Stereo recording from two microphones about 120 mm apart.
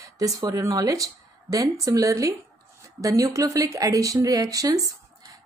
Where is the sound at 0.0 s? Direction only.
30° right (ahead or behind).